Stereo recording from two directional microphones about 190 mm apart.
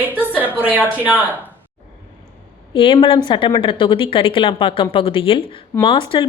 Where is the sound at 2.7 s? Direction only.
25° left (ahead or behind).